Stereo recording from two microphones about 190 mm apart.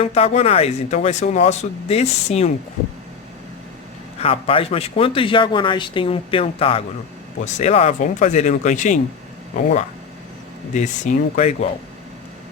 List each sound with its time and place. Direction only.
0.0 s speech: 35° left (ahead or behind)
4.2 s speech: 30° left (ahead or behind)
10.8 s speech: 40° left (ahead or behind)